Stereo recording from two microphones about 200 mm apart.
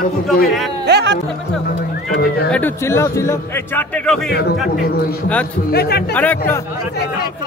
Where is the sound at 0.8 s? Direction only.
60° right (ahead or behind).